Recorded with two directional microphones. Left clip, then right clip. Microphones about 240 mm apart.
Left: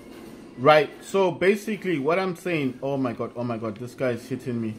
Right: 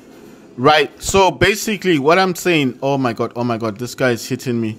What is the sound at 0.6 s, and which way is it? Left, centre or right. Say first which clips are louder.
A man's voice: right 5 dB; right.